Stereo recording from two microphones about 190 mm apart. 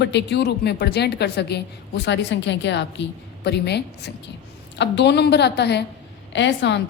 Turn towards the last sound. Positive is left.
turn(degrees=65)  # may be behind; listen again after turning